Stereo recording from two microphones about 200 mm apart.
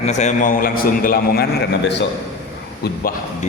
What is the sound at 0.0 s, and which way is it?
Speech, 35° left (ahead or behind).